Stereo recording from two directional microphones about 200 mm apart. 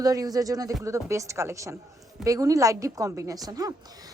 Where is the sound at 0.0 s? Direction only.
20° right (ahead or behind).